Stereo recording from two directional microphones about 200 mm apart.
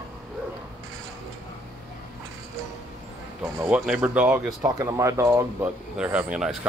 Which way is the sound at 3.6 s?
5° right (ahead or behind).